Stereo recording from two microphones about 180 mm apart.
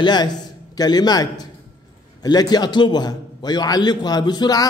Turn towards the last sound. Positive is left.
turn(degrees=20)  # may be behind; listen again after turning